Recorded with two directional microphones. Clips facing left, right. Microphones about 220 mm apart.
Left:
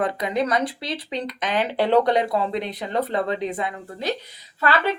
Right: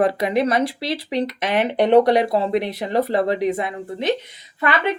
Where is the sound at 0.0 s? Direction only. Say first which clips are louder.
Right 5 dB; 25° right (ahead or behind).